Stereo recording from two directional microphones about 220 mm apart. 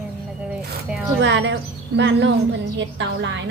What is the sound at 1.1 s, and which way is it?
A woman's voice, 55° right (ahead or behind).